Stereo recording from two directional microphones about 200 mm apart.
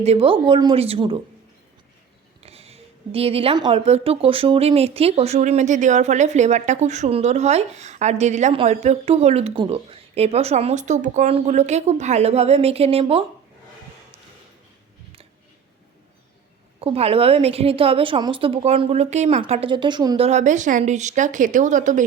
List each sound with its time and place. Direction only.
0.0 s speech: 30° right (ahead or behind)
2.4 s speech: 30° right (ahead or behind)
16.8 s speech: 30° right (ahead or behind)